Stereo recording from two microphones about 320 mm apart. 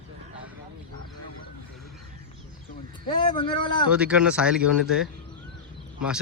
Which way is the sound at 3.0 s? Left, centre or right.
Centre.